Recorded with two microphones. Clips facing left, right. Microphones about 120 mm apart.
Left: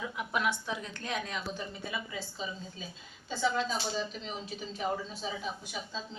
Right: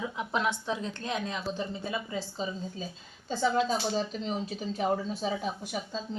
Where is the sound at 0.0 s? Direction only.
25° right (ahead or behind).